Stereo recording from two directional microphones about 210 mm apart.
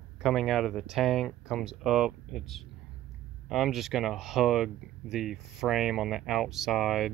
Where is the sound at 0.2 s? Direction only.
Centre (ahead or behind).